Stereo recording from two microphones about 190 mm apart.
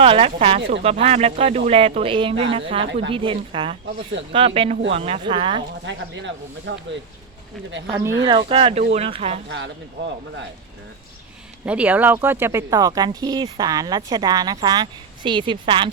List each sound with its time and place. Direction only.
0.0 s speech: 30° right (ahead or behind)
2.8 s speech: 70° right (ahead or behind)
3.1 s speech: 25° right (ahead or behind)
5.8 s speech: 70° right (ahead or behind)
8.3 s speech: 25° right (ahead or behind)
11.6 s speech: 5° right (ahead or behind); by 15.9 s 25° right (ahead or behind)